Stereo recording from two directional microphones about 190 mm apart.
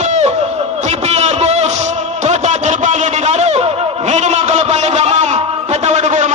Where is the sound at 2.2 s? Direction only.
35° right (ahead or behind).